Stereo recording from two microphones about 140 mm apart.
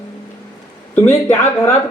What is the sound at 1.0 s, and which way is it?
Speech, 15° left (ahead or behind).